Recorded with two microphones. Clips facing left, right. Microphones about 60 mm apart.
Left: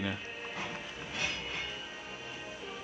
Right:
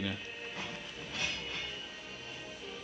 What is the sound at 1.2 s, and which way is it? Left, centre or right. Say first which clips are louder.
Music: left 2 dB; left.